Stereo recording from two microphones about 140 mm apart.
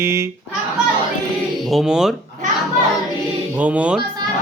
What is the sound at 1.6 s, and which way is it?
Speech, 5° right (ahead or behind).